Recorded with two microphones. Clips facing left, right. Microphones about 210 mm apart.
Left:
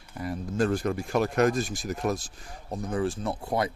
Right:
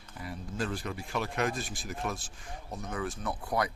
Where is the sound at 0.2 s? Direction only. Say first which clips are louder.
Left 9 dB; 45° left (ahead or behind).